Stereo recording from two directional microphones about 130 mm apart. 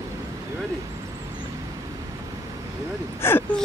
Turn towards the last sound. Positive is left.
turn(degrees=15)  # may be behind; listen again after turning